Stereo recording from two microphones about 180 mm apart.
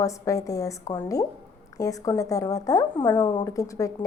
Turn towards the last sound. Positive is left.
turn(degrees=20)  # may be behind; listen again after turning